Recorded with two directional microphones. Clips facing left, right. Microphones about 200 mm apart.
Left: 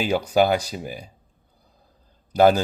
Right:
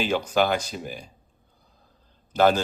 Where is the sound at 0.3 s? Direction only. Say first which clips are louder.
Left 5 dB; 10° left (ahead or behind).